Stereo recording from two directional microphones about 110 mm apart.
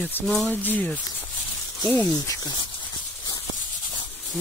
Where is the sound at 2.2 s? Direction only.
25° left (ahead or behind).